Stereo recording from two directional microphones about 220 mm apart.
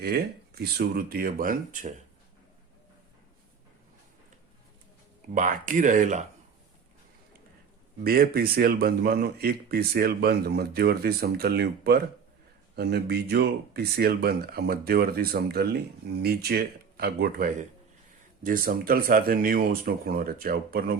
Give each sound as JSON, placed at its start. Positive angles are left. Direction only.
{"t": 0.0, "sound": "speech", "side_deg": -45}
{"t": 5.3, "sound": "speech", "side_deg": -35}
{"t": 8.0, "sound": "speech", "side_deg": -45}